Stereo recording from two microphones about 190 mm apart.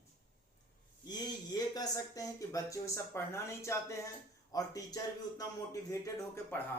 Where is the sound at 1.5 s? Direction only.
20° left (ahead or behind).